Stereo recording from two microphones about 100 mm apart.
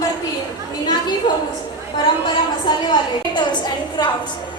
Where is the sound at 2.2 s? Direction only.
50° left (ahead or behind).